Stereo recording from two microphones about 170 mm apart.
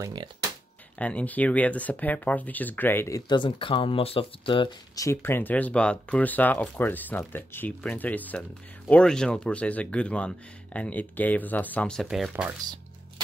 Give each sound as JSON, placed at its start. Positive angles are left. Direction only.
{"t": 0.0, "sound": "speech", "side_deg": -25}
{"t": 0.9, "sound": "speech", "side_deg": 10}